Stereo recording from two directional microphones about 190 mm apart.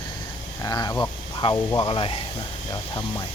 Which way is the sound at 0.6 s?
20° left (ahead or behind).